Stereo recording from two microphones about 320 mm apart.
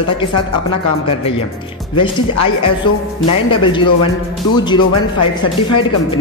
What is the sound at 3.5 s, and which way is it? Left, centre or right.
Speech, centre.